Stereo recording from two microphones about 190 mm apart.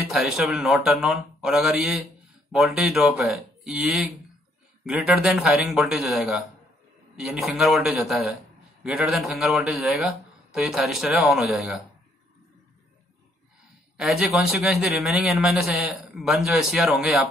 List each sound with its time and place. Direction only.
0.1 s a man's voice: centre (ahead or behind)
13.9 s a man's voice: centre (ahead or behind)